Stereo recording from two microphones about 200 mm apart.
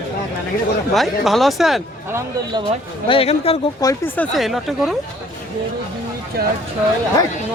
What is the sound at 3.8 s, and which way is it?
Speech, 10° left (ahead or behind).